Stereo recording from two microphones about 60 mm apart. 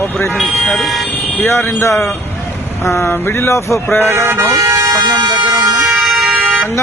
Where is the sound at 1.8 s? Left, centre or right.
Left.